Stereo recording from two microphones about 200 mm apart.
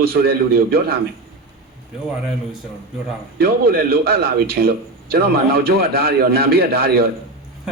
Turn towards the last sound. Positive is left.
turn(degrees=-50)  # may be behind; listen again after turning